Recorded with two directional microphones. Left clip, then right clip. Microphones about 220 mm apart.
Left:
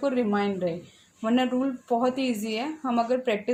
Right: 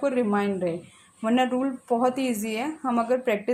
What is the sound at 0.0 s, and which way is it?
A woman's voice, 15° right (ahead or behind).